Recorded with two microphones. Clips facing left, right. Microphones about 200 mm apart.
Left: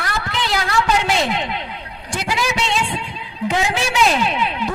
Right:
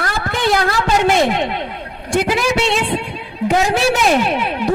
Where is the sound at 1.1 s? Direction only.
50° right (ahead or behind).